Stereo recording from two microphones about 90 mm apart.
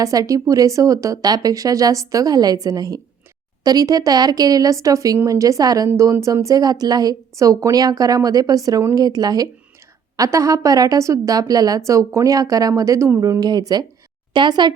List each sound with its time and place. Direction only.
0.0 s a woman's voice: 40° right (ahead or behind); by 14.7 s 55° right (ahead or behind)